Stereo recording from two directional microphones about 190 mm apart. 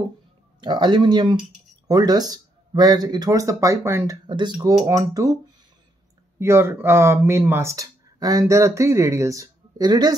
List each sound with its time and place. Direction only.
0.6 s speech: 25° right (ahead or behind)
6.4 s speech: 15° right (ahead or behind)